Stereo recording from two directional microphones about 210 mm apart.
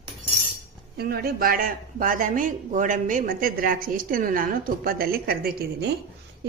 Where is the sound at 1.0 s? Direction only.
45° right (ahead or behind).